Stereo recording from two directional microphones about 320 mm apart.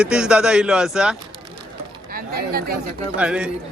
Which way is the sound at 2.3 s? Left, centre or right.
Right.